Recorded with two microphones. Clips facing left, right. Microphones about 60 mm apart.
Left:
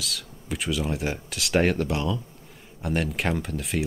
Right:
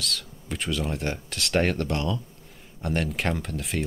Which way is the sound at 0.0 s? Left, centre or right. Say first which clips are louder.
Right 2 dB; centre.